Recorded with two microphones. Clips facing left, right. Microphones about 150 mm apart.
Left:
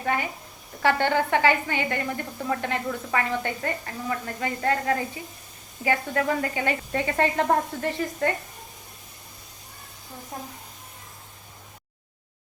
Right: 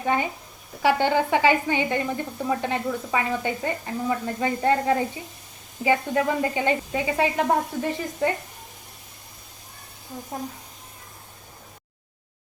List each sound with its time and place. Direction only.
0.0 s speech: 25° right (ahead or behind)
6.9 s speech: 10° right (ahead or behind)